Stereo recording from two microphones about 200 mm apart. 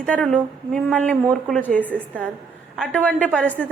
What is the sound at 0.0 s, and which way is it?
A woman's voice, 5° left (ahead or behind).